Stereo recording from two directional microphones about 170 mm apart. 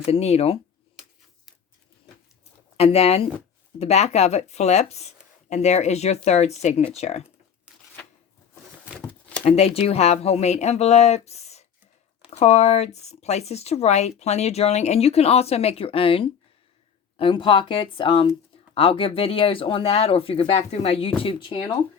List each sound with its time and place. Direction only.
0.0 s speech: 35° left (ahead or behind)
2.7 s speech: 35° left (ahead or behind)
9.4 s speech: 35° left (ahead or behind)